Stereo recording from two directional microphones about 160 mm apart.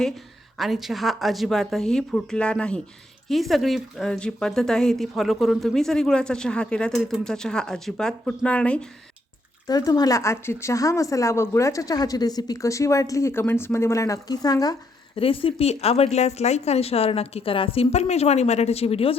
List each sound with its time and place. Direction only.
0.5 s speech: centre (ahead or behind)
9.6 s speech: 25° left (ahead or behind)
15.1 s a woman's voice: 35° left (ahead or behind)